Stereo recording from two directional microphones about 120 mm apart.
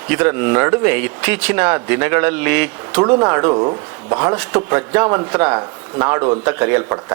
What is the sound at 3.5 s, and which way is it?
Speech, 40° right (ahead or behind).